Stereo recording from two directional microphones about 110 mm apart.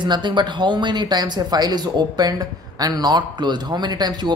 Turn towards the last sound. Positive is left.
turn(degrees=-40)  # may be behind; listen again after turning